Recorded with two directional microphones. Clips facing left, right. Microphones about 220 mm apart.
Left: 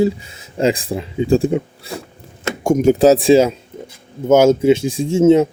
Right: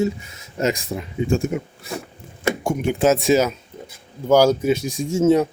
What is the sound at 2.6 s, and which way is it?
Speech, 40° left (ahead or behind).